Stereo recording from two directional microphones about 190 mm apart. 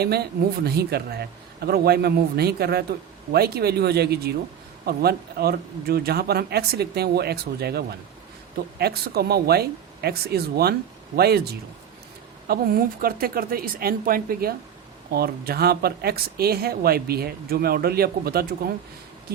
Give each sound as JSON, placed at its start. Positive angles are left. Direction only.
{"t": 0.0, "sound": "speech", "side_deg": -55}